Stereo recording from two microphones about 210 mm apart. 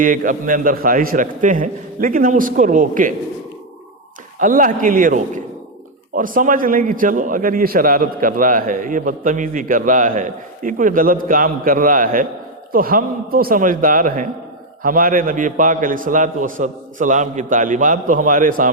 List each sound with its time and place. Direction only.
0.0 s a man's voice: 40° right (ahead or behind)
4.4 s a man's voice: 40° right (ahead or behind)